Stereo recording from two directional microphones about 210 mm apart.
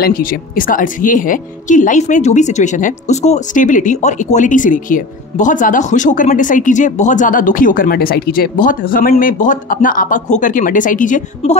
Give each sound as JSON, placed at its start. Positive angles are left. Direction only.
{"t": 0.0, "sound": "speech", "side_deg": 45}